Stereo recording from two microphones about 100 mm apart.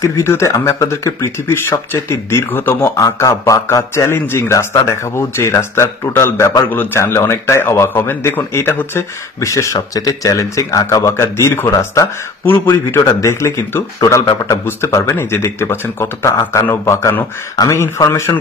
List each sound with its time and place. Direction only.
0.0 s speech: 30° left (ahead or behind)
3.0 s speech: 35° left (ahead or behind)